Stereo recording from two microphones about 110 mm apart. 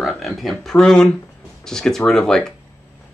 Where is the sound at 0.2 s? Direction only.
Centre (ahead or behind).